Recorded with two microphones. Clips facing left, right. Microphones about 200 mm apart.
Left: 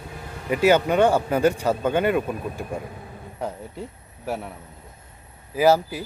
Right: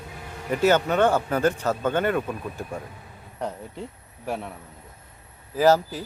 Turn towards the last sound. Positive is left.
turn(degrees=10)  # may be behind; listen again after turning